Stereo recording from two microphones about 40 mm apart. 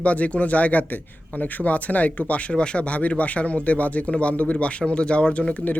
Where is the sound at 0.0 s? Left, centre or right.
Left.